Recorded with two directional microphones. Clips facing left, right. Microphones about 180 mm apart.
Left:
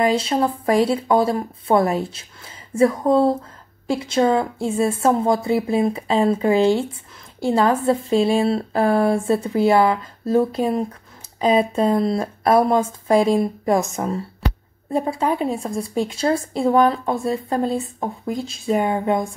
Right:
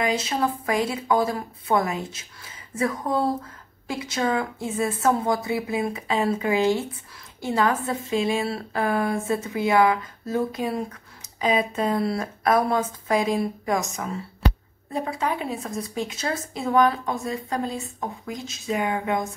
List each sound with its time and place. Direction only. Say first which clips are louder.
0.1 s a woman's voice: left 5 dB; 30° left (ahead or behind)